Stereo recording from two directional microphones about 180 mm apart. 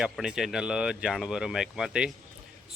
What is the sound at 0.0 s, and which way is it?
Speech, 5° right (ahead or behind).